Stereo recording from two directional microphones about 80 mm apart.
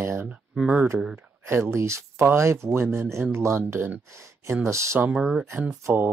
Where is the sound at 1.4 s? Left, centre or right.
Right.